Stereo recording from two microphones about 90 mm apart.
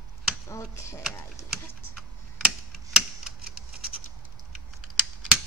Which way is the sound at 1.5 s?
5° right (ahead or behind).